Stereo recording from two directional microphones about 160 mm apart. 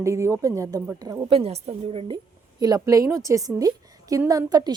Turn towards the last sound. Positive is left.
turn(degrees=-25)  # may be behind; listen again after turning